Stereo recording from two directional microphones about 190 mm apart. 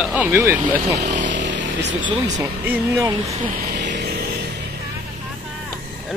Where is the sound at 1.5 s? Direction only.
70° right (ahead or behind).